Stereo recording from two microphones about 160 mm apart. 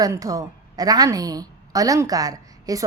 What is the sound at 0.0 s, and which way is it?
A woman's voice, 20° right (ahead or behind).